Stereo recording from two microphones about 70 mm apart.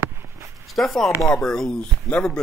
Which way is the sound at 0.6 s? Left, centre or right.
Centre.